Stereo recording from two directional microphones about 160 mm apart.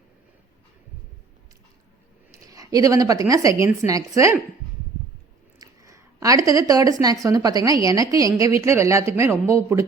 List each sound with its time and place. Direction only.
2.3 s speech: 20° right (ahead or behind)
5.5 s speech: 20° right (ahead or behind)